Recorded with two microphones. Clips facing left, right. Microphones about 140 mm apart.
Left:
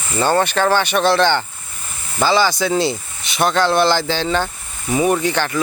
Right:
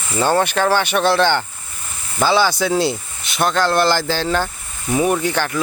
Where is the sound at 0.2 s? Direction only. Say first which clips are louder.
Even; 10° right (ahead or behind).